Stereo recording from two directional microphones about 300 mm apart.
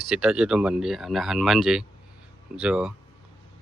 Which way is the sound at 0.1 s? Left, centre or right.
Centre.